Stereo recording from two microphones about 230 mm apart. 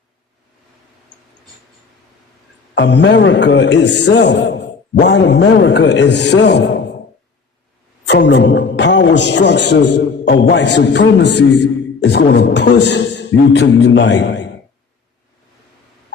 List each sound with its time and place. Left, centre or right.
2.7 s a man's voice: left
8.0 s a man's voice: left